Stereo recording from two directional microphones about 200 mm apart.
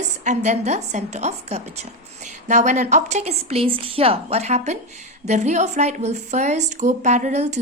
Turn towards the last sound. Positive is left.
turn(degrees=-35)  # may be behind; listen again after turning